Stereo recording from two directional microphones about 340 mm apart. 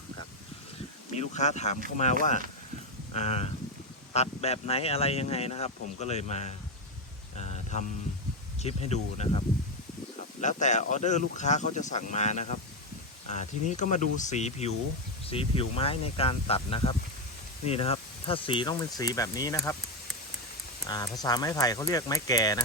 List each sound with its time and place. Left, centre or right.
1.1 s speech: centre
3.1 s speech: centre
7.3 s mantra: centre
8.6 s speech: centre
10.4 s speech: left
20.8 s speech: centre